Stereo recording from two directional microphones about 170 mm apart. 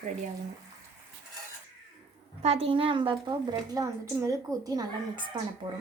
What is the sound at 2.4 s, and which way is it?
Speech, 35° right (ahead or behind).